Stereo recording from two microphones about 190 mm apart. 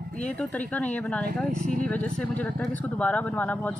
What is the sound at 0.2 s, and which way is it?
Speech, 5° left (ahead or behind).